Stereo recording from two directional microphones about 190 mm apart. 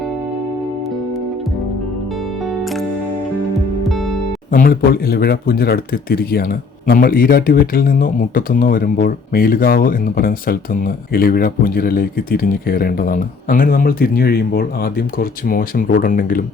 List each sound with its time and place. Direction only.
2.5 s music: centre (ahead or behind)
3.8 s heart sounds: centre (ahead or behind)
4.5 s speech: 50° left (ahead or behind)